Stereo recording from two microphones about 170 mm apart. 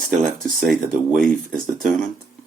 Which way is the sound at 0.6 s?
Centre (ahead or behind).